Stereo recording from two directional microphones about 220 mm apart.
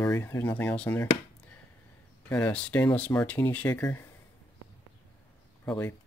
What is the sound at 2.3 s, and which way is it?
Speech, 10° left (ahead or behind).